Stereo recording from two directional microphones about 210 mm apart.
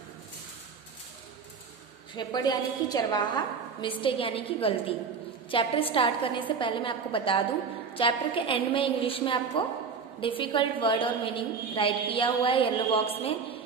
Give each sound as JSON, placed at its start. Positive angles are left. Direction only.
{"t": 2.1, "sound": "a woman's voice", "side_deg": 20}